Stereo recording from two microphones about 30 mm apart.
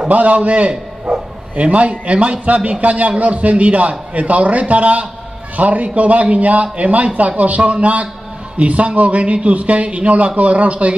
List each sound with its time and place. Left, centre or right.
0.1 s a man's voice: right